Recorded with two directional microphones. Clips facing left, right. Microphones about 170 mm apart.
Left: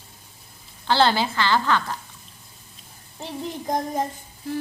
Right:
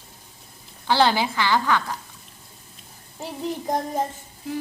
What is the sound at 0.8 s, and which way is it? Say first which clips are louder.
A woman's voice: even; 15° right (ahead or behind).